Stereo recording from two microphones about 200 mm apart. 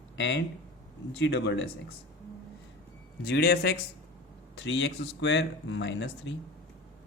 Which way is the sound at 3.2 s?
50° left (ahead or behind).